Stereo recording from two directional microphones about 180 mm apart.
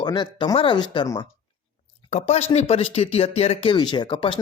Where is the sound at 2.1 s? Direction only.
35° left (ahead or behind).